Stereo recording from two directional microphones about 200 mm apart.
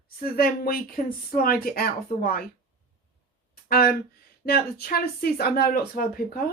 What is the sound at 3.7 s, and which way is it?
Speech, 50° left (ahead or behind).